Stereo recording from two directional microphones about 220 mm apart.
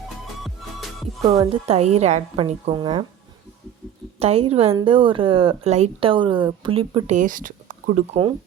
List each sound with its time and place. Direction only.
1.2 s speech: 15° right (ahead or behind)
1.6 s speech: 30° right (ahead or behind)
4.2 s speech: 25° right (ahead or behind)